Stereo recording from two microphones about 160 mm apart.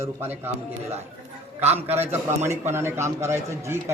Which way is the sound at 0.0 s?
15° right (ahead or behind).